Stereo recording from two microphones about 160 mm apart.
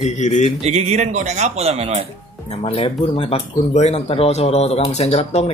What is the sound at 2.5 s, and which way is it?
Speech, 35° left (ahead or behind).